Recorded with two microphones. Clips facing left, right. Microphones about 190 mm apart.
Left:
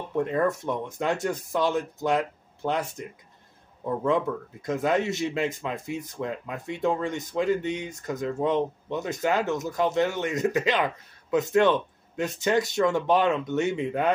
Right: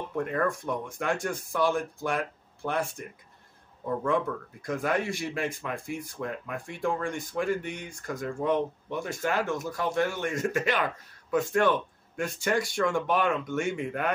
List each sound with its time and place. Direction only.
0.1 s speech: 25° left (ahead or behind)